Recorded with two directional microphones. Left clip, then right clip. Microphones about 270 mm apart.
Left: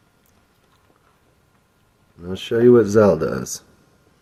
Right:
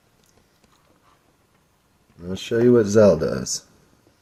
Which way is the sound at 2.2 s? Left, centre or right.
Centre.